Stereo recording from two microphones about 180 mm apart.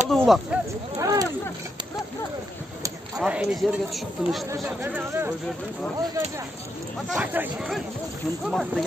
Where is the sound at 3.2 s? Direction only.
5° right (ahead or behind).